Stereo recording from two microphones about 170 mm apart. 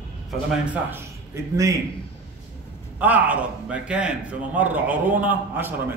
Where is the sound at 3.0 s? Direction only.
10° right (ahead or behind).